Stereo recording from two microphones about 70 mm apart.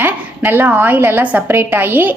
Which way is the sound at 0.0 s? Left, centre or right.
Right.